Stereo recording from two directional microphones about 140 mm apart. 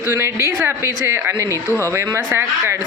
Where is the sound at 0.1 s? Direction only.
20° right (ahead or behind).